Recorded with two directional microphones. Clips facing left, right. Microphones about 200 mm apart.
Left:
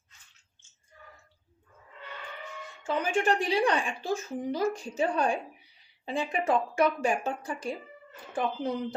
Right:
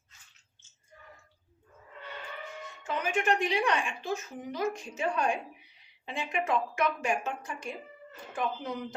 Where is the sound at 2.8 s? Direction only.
30° left (ahead or behind).